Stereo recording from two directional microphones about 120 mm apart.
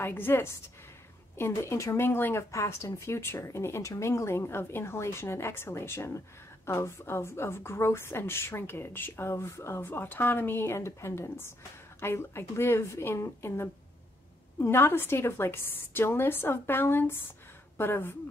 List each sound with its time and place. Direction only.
0.0 s speech: 20° left (ahead or behind)